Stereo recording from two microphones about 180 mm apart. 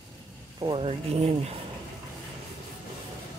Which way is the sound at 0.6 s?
30° right (ahead or behind).